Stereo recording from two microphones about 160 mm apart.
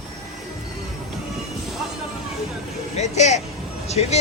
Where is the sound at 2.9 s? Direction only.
45° left (ahead or behind).